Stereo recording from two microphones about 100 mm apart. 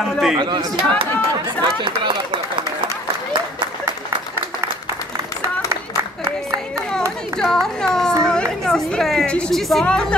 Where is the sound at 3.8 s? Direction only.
25° right (ahead or behind).